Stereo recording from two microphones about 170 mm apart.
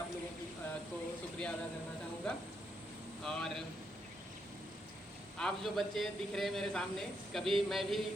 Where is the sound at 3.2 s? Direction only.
5° left (ahead or behind).